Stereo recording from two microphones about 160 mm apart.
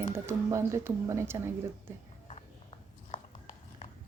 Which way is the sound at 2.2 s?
40° left (ahead or behind).